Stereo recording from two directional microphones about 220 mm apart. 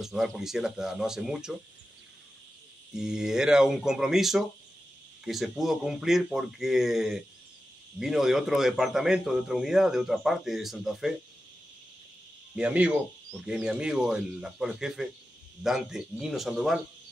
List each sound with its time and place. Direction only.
0.0 s a man's voice: centre (ahead or behind)
2.9 s a man's voice: 5° right (ahead or behind)
12.5 s a man's voice: 5° right (ahead or behind)